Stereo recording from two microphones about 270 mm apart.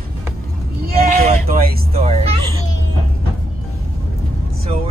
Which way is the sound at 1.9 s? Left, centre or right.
Right.